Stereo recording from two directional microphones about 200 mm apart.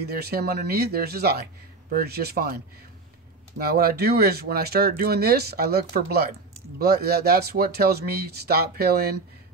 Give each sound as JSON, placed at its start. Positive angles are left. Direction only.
{"t": 0.0, "sound": "speech", "side_deg": -50}